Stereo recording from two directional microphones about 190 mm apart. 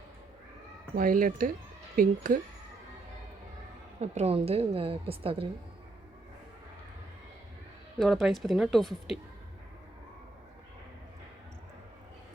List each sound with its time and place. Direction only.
0.9 s speech: 45° right (ahead or behind)
4.0 s a woman's voice: 35° right (ahead or behind)
7.9 s speech: centre (ahead or behind)